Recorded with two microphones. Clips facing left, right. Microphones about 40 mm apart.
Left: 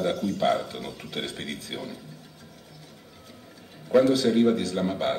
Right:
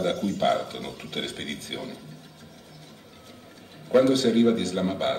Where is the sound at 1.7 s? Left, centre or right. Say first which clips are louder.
Even; right.